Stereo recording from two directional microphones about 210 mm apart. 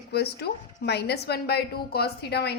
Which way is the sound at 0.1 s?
50° left (ahead or behind).